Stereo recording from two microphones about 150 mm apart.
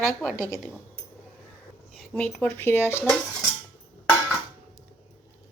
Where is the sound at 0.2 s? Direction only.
Centre (ahead or behind).